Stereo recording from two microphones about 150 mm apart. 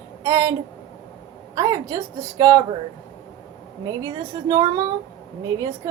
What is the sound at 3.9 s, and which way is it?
A woman's voice, 25° right (ahead or behind).